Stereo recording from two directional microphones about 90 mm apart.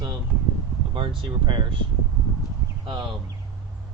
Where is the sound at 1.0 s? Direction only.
65° right (ahead or behind).